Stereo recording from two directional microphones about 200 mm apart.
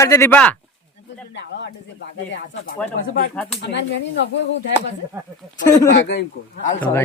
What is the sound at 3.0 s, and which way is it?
Speech, 45° left (ahead or behind).